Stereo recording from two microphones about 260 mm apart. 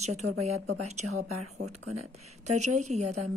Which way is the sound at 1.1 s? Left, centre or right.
Right.